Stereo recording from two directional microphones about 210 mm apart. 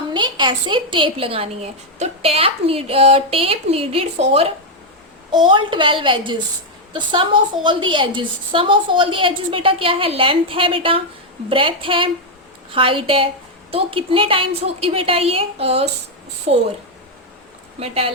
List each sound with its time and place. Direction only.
0.1 s a woman's voice: 20° right (ahead or behind)
17.7 s a woman's voice: 30° right (ahead or behind)